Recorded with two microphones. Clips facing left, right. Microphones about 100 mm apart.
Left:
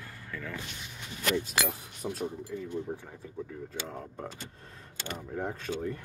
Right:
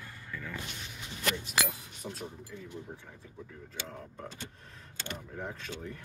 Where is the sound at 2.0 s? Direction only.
50° left (ahead or behind).